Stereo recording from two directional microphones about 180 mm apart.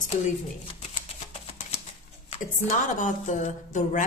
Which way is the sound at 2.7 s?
45° left (ahead or behind).